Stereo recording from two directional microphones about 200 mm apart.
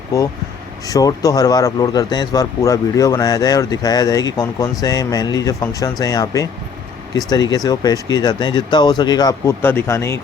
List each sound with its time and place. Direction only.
0.9 s speech: 15° left (ahead or behind)